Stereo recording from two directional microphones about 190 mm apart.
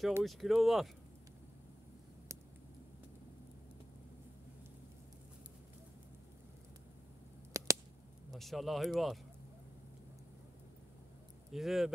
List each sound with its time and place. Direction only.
0.2 s speech: centre (ahead or behind)
7.5 s a sound: 15° right (ahead or behind)
8.3 s speech: centre (ahead or behind)
11.5 s speech: centre (ahead or behind)